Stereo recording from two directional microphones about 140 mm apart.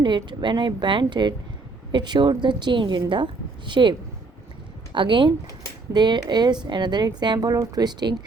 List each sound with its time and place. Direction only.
0.0 s speech: 35° right (ahead or behind)